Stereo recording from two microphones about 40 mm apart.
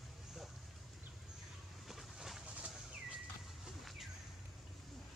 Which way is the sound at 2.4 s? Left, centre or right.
Right.